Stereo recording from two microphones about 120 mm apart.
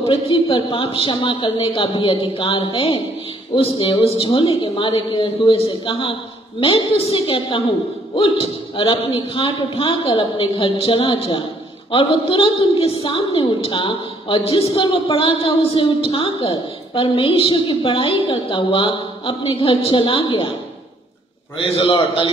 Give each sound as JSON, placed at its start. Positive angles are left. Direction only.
{"t": 0.0, "sound": "a woman's voice", "side_deg": 50}
{"t": 21.7, "sound": "a woman's voice", "side_deg": 50}